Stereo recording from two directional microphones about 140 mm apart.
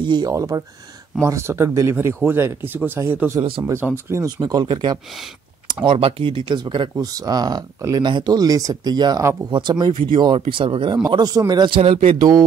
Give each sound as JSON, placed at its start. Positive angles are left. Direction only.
{"t": 0.0, "sound": "speech", "side_deg": -30}
{"t": 4.4, "sound": "speech", "side_deg": -30}
{"t": 5.9, "sound": "speech", "side_deg": -40}